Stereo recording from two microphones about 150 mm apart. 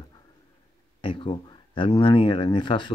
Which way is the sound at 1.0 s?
35° left (ahead or behind).